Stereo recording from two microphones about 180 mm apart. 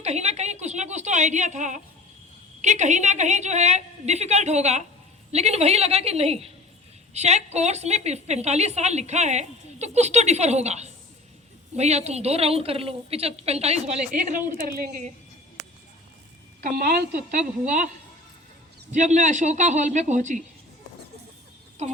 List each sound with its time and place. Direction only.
0.0 s a sound: 40° right (ahead or behind)
2.6 s a woman's voice: 40° right (ahead or behind)
14.5 s speech: 55° right (ahead or behind)
16.6 s a woman's voice: 65° right (ahead or behind)
17.7 s speech: 45° right (ahead or behind)
21.8 s a woman's voice: 35° right (ahead or behind)